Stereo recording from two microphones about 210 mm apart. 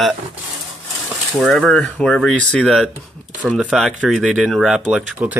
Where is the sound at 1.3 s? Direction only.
Centre (ahead or behind).